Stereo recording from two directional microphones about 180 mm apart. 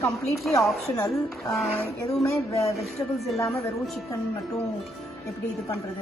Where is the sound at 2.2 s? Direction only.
15° left (ahead or behind).